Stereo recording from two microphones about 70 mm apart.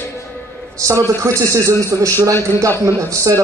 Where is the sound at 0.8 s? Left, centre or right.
Right.